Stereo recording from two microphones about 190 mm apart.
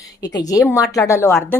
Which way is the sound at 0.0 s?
20° left (ahead or behind).